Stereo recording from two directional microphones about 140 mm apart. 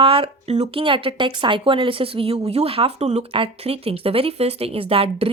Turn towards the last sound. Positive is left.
turn(degrees=-40)  # may be behind; listen again after turning